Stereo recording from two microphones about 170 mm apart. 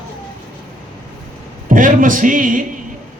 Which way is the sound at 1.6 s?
50° right (ahead or behind).